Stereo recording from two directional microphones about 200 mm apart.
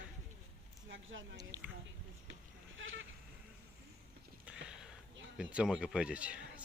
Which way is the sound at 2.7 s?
70° right (ahead or behind).